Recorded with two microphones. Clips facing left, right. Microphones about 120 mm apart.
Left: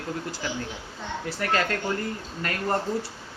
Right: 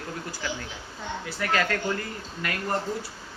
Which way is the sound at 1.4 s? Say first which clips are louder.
Even; 40° left (ahead or behind).